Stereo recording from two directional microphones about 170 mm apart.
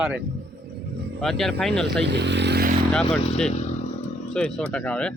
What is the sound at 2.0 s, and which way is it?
Vehicle, 90° right.